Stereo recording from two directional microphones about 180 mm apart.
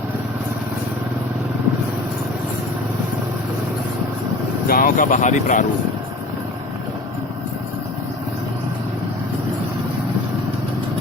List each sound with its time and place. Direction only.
4.7 s speech: 50° left (ahead or behind)